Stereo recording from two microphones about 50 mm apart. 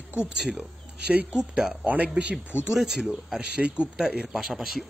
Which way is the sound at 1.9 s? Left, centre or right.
Right.